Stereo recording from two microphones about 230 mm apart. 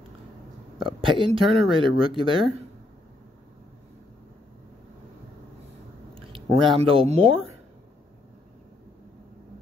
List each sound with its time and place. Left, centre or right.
0.7 s speech: right
6.1 s speech: right